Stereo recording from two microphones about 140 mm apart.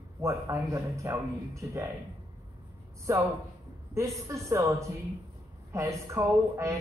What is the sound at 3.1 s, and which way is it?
A man's voice, 20° right (ahead or behind).